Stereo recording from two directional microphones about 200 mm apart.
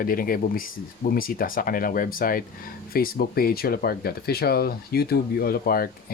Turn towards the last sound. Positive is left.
turn(degrees=50)  # may be behind; listen again after turning